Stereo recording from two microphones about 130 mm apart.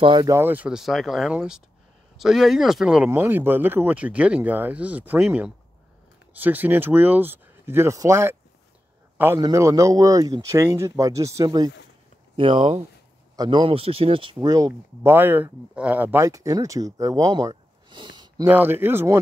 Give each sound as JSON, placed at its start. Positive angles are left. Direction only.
{"t": 0.0, "sound": "speech", "side_deg": -40}
{"t": 0.3, "sound": "speech", "side_deg": -15}
{"t": 3.1, "sound": "speech", "side_deg": -15}
{"t": 9.4, "sound": "speech", "side_deg": -25}
{"t": 12.4, "sound": "speech", "side_deg": -40}
{"t": 14.4, "sound": "speech", "side_deg": -25}
{"t": 18.4, "sound": "speech", "side_deg": -15}